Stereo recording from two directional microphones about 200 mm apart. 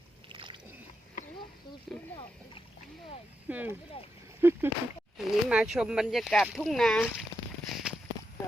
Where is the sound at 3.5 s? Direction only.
10° right (ahead or behind).